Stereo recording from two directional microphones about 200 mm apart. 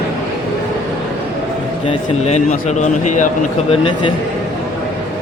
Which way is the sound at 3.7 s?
25° left (ahead or behind).